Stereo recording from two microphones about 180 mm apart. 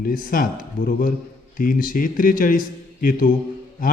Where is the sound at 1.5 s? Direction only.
50° left (ahead or behind).